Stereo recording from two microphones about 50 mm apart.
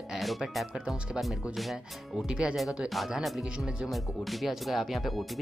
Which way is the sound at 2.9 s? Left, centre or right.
Centre.